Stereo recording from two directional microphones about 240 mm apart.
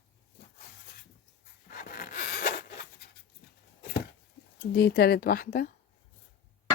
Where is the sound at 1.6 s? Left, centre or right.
Left.